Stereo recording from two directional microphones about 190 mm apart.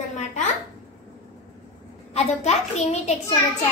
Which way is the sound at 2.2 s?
35° left (ahead or behind).